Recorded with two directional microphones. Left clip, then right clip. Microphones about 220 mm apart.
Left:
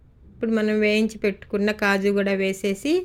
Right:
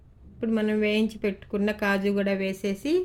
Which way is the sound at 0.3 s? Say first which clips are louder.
Left 4 dB; 10° left (ahead or behind).